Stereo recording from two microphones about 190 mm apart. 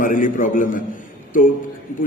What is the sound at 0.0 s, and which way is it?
Speech, 45° left (ahead or behind).